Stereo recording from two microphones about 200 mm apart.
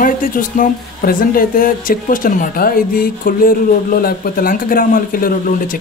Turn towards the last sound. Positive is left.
turn(degrees=45)  # may be behind; listen again after turning